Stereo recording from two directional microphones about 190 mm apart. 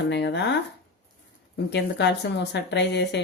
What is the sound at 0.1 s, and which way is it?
Speech, 65° left (ahead or behind).